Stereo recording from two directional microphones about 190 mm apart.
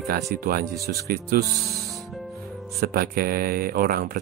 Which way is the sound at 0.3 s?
50° right (ahead or behind).